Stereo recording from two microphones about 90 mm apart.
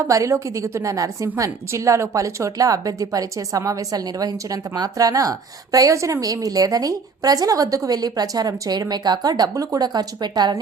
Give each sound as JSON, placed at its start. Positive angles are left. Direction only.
{"t": 0.1, "sound": "a woman's voice", "side_deg": -35}